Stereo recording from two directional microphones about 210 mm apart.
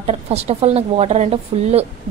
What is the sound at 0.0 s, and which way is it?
A woman's voice, 30° right (ahead or behind).